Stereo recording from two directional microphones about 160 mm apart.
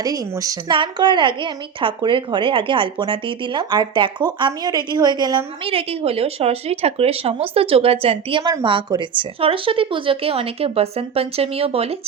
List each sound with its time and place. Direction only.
0.0 s speech: 20° right (ahead or behind)
5.7 s a woman's voice: 35° right (ahead or behind)